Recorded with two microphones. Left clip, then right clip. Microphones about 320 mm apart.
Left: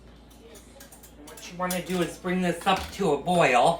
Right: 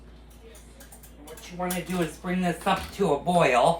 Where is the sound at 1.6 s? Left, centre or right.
Centre.